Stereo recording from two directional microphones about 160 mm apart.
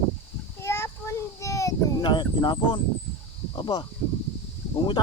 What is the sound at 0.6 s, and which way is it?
Children playing, 15° left (ahead or behind).